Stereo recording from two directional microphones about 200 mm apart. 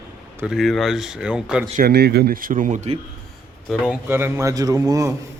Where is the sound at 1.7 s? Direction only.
50° right (ahead or behind); by 2.9 s 35° right (ahead or behind).